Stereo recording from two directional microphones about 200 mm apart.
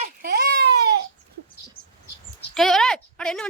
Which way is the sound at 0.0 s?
45° right (ahead or behind).